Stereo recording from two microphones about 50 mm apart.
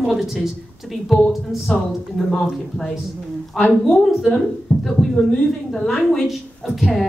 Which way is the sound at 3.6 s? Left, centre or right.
Centre.